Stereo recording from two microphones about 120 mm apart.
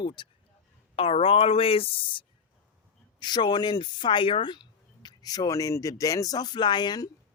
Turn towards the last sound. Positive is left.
turn(degrees=35)  # may be behind; listen again after turning